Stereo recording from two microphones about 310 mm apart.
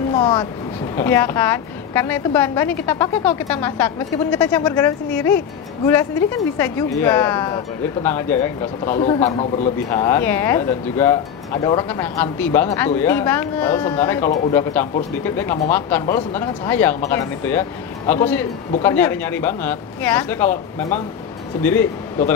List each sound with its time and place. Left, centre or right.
0.1 s a woman's voice: centre
8.9 s speech: left
9.8 s a woman's voice: centre